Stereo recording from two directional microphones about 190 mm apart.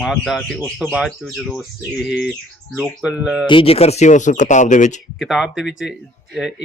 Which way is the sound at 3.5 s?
30° left (ahead or behind).